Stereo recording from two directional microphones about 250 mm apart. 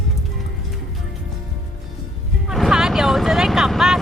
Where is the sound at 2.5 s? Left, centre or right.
Centre.